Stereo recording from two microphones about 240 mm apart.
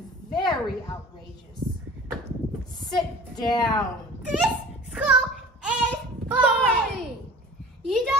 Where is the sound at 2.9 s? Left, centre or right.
Centre.